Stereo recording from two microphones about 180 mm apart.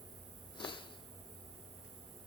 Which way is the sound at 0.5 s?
25° left (ahead or behind).